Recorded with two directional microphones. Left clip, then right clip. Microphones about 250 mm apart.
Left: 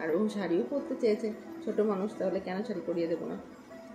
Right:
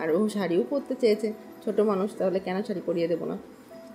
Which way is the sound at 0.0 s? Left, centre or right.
Right.